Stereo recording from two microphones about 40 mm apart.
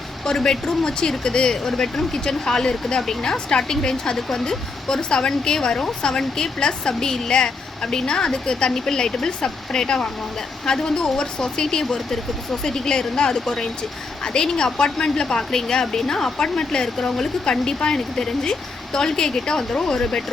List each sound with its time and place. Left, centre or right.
0.3 s speech: centre